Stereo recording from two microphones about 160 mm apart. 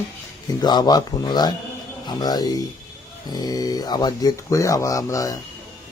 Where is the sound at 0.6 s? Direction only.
25° left (ahead or behind).